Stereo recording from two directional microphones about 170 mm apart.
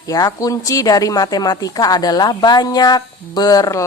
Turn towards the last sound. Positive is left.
turn(degrees=20)  # may be behind; listen again after turning